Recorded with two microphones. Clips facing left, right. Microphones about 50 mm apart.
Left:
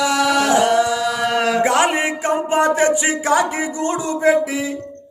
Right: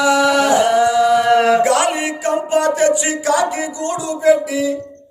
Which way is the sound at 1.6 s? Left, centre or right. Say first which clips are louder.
Right 1 dB; left.